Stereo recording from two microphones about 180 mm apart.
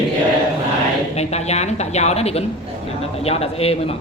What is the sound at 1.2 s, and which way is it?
A man's voice, 35° left (ahead or behind).